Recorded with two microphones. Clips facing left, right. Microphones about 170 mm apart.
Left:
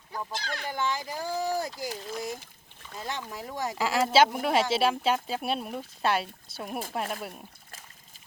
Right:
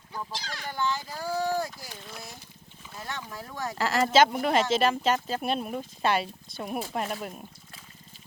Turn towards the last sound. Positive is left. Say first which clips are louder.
# right 1 dB
turn(degrees=5)  # may be behind; listen again after turning